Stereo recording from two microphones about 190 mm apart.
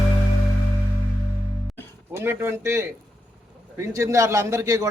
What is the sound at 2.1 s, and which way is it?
A man's voice, 10° right (ahead or behind).